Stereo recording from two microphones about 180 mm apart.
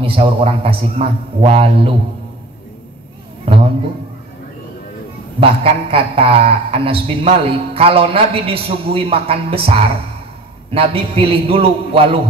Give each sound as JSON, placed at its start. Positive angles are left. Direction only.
{"t": 0.0, "sound": "a man's voice", "side_deg": -30}
{"t": 5.4, "sound": "a man's voice", "side_deg": -30}